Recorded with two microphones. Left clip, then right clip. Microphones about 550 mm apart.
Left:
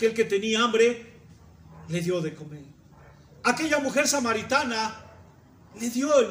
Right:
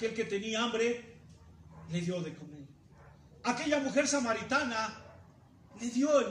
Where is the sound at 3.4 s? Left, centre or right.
Centre.